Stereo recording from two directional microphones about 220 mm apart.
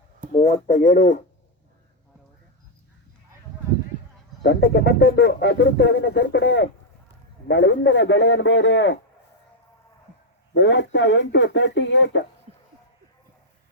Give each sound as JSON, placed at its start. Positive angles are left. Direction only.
{"t": 0.3, "sound": "speech", "side_deg": 30}
{"t": 4.4, "sound": "speech", "side_deg": 45}
{"t": 10.5, "sound": "speech", "side_deg": 55}